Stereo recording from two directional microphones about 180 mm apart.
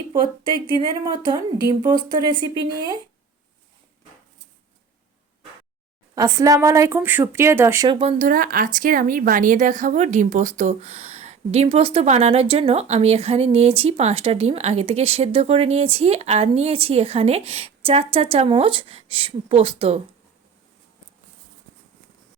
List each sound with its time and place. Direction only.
0.8 s speech: 25° right (ahead or behind)
2.4 s speech: 20° right (ahead or behind)
6.1 s a woman's voice: 20° right (ahead or behind)
7.9 s speech: 25° right (ahead or behind)
8.2 s a woman's voice: 50° right (ahead or behind); by 20.0 s 30° right (ahead or behind)